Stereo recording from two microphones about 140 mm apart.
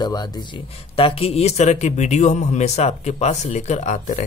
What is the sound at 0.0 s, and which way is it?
Speech, 30° left (ahead or behind).